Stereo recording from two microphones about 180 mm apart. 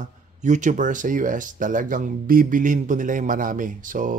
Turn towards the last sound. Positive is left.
turn(degrees=-50)  # may be behind; listen again after turning